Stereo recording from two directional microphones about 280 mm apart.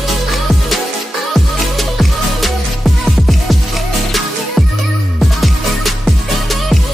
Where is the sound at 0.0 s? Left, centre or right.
Centre.